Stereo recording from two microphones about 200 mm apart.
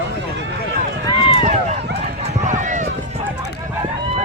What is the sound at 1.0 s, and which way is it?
Run, 20° left (ahead or behind).